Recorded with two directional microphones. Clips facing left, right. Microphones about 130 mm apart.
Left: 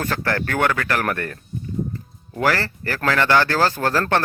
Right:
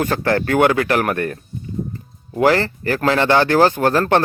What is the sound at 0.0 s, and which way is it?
Speech, 20° right (ahead or behind).